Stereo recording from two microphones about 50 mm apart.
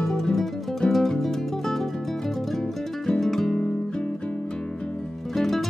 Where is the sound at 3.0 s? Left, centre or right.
Centre.